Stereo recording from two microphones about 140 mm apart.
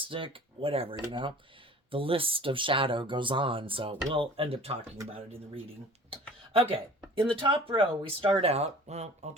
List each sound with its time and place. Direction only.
0.0 s speech: 40° right (ahead or behind)
6.1 s speech: 40° right (ahead or behind)